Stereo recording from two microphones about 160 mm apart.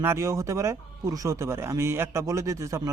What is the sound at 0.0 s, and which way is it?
Speech, 15° right (ahead or behind).